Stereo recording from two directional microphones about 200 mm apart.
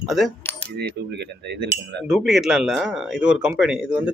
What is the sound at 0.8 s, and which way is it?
Cutlery, 55° right (ahead or behind).